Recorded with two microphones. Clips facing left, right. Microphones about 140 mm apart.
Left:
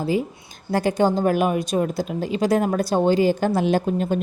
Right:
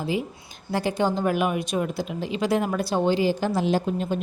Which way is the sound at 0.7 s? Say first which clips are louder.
Left 4 dB; 45° left (ahead or behind).